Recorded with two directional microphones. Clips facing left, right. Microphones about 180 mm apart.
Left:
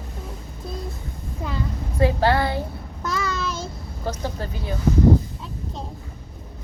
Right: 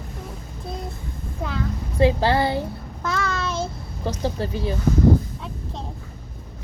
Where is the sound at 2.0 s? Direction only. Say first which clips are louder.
Right 1 dB; 25° right (ahead or behind).